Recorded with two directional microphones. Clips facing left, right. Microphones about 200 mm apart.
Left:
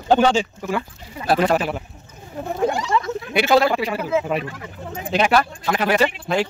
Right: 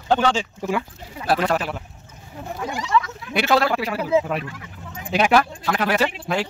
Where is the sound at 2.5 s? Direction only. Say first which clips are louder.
Left 2 dB; 50° left (ahead or behind).